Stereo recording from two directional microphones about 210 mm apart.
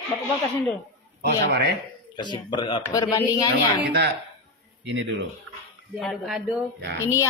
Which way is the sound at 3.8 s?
55° right (ahead or behind).